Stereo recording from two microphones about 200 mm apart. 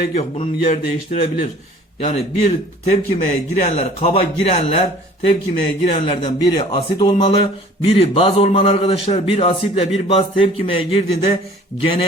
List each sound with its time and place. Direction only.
0.1 s a man's voice: 30° left (ahead or behind)
3.5 s a man's voice: 35° left (ahead or behind)